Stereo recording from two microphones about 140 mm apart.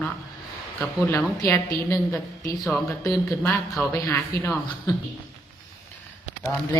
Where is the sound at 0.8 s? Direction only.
15° left (ahead or behind).